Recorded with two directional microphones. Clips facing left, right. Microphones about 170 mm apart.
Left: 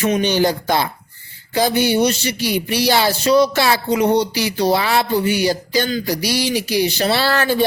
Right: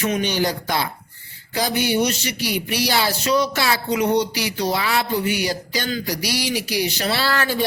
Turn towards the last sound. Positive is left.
turn(degrees=30)  # may be behind; listen again after turning